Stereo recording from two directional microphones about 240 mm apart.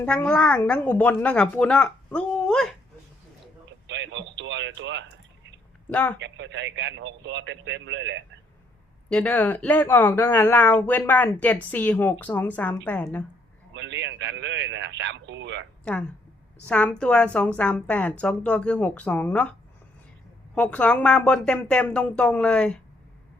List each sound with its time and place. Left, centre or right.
0.0 s speech: centre
3.7 s radio: right
5.9 s speech: centre
6.1 s a man's voice: right
9.0 s speech: centre
13.7 s a man's voice: right
15.8 s speech: centre
20.6 s speech: centre